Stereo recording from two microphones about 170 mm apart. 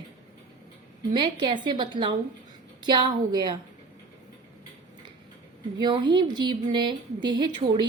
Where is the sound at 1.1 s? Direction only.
30° right (ahead or behind).